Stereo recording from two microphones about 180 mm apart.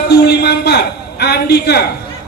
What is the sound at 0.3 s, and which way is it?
A man's voice, 65° left (ahead or behind).